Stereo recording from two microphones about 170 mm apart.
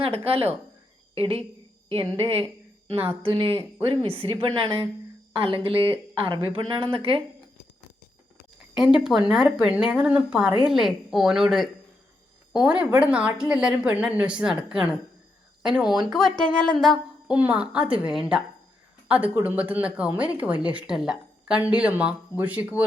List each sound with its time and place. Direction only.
0.0 s a woman's voice: 35° right (ahead or behind)
8.7 s speech: 5° right (ahead or behind)